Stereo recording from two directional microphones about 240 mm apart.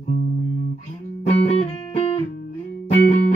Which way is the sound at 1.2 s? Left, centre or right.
Left.